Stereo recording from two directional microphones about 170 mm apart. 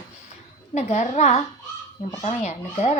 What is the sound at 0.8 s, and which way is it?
A woman's voice, 40° left (ahead or behind).